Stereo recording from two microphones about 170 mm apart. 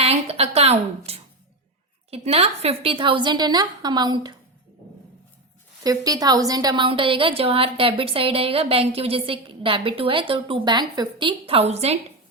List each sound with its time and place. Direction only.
0.0 s a sound: 35° right (ahead or behind)
2.0 s a woman's voice: 35° right (ahead or behind)
5.8 s a woman's voice: 20° right (ahead or behind); by 11.9 s 40° right (ahead or behind)